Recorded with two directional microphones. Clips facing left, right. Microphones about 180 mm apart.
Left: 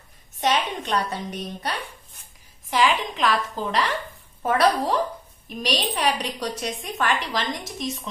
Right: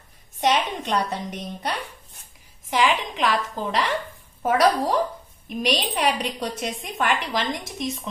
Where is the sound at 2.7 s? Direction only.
15° right (ahead or behind).